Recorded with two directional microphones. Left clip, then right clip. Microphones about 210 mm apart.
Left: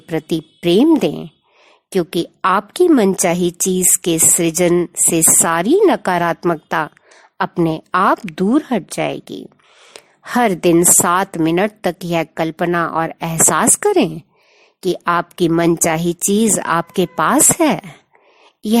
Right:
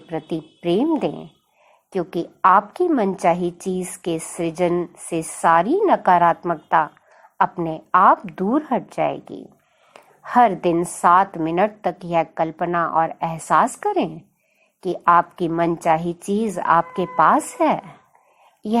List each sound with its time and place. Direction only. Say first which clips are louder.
0.1 s a woman's voice: left 7 dB; 55° left (ahead or behind)